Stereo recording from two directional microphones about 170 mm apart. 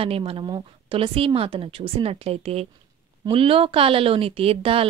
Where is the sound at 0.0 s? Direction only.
35° right (ahead or behind).